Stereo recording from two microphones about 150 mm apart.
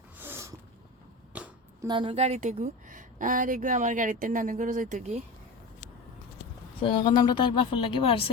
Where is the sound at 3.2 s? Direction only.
60° right (ahead or behind).